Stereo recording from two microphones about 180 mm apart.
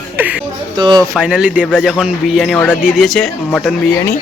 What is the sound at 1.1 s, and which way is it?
Speech, 5° right (ahead or behind).